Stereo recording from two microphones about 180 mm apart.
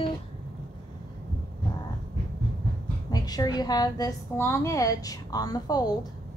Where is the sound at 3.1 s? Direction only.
20° left (ahead or behind).